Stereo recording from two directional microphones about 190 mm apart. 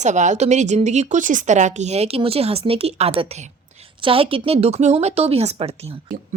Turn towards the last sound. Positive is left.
turn(degrees=-30)  # may be behind; listen again after turning